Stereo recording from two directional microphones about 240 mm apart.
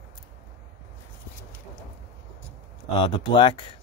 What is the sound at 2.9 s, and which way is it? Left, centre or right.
Speech, left.